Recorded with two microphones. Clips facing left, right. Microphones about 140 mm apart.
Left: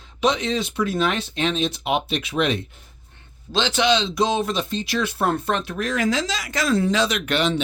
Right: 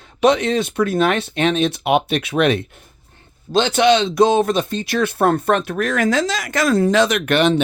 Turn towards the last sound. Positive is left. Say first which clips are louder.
# right 6 dB
turn(degrees=-55)  # may be behind; listen again after turning